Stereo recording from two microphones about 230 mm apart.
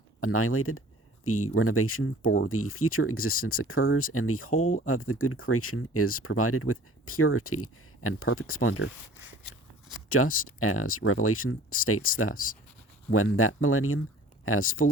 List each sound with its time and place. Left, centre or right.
0.2 s speech: left
10.2 s speech: left